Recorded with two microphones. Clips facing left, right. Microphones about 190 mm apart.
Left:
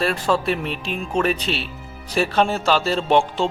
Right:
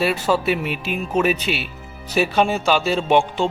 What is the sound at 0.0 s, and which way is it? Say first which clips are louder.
Music: right 1 dB; 5° right (ahead or behind).